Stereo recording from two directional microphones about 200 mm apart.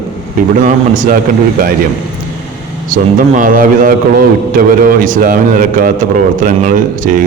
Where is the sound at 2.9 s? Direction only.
40° right (ahead or behind).